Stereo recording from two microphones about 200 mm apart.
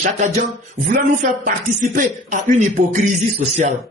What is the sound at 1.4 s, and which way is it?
Music, 40° right (ahead or behind).